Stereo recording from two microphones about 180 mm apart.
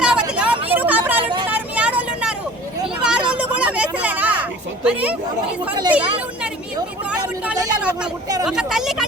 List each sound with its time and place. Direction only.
0.0 s vehicle: 5° right (ahead or behind)
1.2 s vehicle: 25° right (ahead or behind)
1.5 s vehicle: 10° right (ahead or behind)
2.8 s a sound: 5° right (ahead or behind)
4.8 s a woman's voice: 5° right (ahead or behind)